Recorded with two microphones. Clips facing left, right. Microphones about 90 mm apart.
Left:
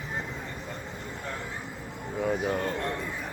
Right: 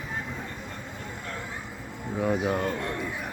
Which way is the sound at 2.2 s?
5° right (ahead or behind).